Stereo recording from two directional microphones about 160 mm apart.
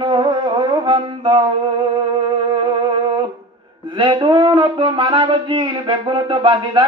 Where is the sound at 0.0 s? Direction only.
30° right (ahead or behind).